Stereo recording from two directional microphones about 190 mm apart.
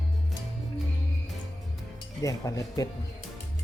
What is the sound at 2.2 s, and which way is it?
Speech, 15° left (ahead or behind).